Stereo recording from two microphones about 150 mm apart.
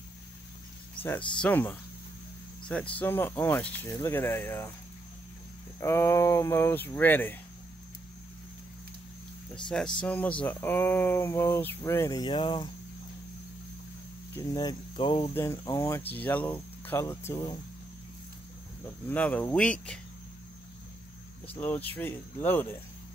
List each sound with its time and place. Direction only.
1.4 s speech: 10° left (ahead or behind)
5.8 s a sound: 20° left (ahead or behind)
7.0 s speech: 10° left (ahead or behind)
9.7 s speech: 5° left (ahead or behind); by 12.6 s 30° left (ahead or behind)
14.3 s a sound: 25° left (ahead or behind)
16.1 s speech: 10° left (ahead or behind)
19.0 s speech: 10° left (ahead or behind)
21.5 s speech: 10° left (ahead or behind)